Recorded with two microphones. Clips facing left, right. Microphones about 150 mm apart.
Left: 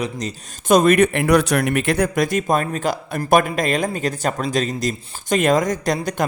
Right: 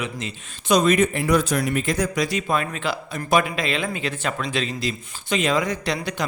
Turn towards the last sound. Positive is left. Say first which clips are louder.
# left 5 dB
turn(degrees=45)  # may be behind; listen again after turning